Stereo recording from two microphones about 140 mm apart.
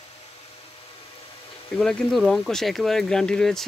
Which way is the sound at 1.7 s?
Centre (ahead or behind).